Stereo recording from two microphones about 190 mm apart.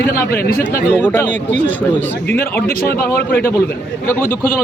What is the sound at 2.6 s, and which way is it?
Speech, 50° left (ahead or behind).